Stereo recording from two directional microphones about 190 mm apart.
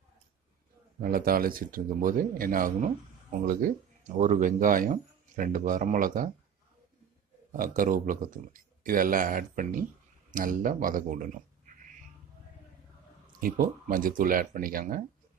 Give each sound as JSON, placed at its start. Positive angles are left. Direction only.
{"t": 1.0, "sound": "speech", "side_deg": -50}
{"t": 7.5, "sound": "speech", "side_deg": -45}
{"t": 13.4, "sound": "speech", "side_deg": -45}